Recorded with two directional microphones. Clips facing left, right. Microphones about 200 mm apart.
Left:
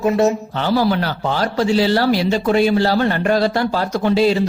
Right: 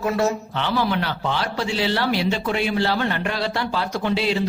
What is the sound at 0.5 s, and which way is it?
A man's voice, 40° left (ahead or behind).